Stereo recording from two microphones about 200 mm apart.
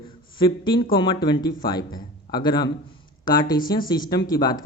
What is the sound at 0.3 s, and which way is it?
A man's voice, 25° left (ahead or behind).